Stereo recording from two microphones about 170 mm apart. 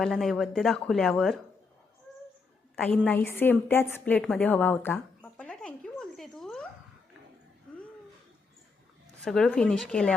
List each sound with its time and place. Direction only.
0.0 s speech: centre (ahead or behind)
2.7 s a sound: 5° left (ahead or behind)
9.2 s speech: 5° left (ahead or behind)